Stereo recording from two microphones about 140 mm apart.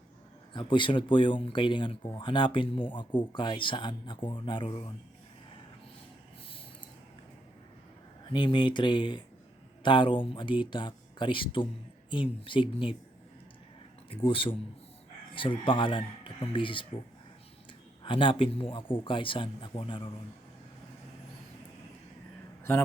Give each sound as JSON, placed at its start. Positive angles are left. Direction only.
{"t": 0.5, "sound": "speech", "side_deg": 35}
{"t": 8.3, "sound": "speech", "side_deg": 35}
{"t": 14.1, "sound": "speech", "side_deg": 40}
{"t": 18.0, "sound": "speech", "side_deg": 40}